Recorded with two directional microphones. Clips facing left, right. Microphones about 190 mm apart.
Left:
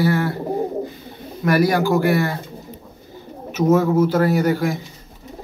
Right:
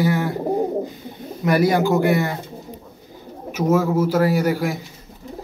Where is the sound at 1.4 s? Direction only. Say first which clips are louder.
Even; 20° right (ahead or behind).